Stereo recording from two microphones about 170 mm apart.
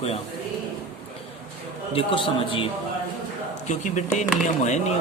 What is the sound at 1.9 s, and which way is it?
Speech, 30° left (ahead or behind).